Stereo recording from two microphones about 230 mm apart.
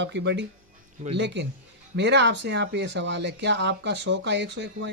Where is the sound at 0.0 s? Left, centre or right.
Right.